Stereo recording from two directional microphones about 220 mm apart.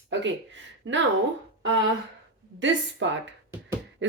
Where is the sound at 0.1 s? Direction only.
55° right (ahead or behind).